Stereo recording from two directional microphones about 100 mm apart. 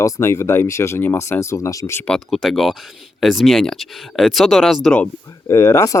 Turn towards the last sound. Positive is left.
turn(degrees=30)  # may be behind; listen again after turning